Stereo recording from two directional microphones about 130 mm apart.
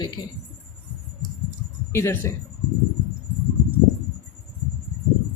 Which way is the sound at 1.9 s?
20° left (ahead or behind).